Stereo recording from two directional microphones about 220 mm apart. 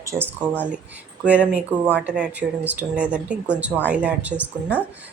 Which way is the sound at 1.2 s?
5° right (ahead or behind).